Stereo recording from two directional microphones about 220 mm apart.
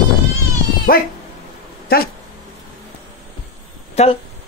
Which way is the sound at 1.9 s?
45° left (ahead or behind).